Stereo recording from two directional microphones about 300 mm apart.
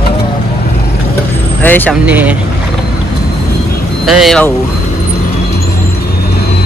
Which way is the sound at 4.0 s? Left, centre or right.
Centre.